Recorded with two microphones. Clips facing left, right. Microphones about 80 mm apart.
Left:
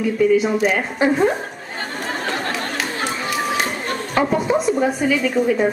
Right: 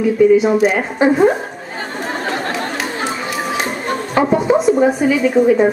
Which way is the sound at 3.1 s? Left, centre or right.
Centre.